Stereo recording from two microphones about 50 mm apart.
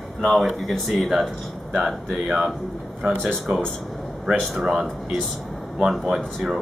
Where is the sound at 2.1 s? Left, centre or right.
Centre.